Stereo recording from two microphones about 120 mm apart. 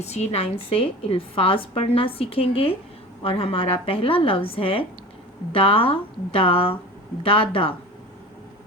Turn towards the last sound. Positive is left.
turn(degrees=50)  # may be behind; listen again after turning